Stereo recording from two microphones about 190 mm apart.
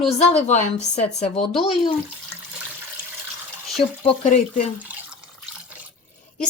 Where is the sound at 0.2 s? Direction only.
35° left (ahead or behind).